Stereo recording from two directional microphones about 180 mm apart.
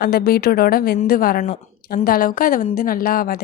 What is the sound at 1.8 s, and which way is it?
A woman's voice, 55° left (ahead or behind).